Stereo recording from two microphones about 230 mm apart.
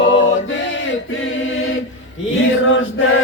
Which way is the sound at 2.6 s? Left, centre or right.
Left.